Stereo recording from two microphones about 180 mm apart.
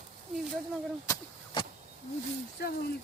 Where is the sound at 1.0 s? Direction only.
15° left (ahead or behind).